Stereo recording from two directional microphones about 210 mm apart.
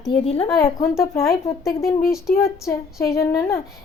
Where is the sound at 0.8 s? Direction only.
15° left (ahead or behind).